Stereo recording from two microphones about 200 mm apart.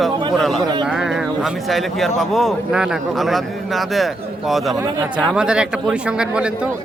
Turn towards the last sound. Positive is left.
turn(degrees=-5)  # may be behind; listen again after turning